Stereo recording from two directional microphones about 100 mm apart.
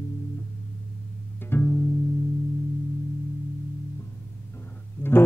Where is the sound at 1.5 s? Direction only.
20° left (ahead or behind).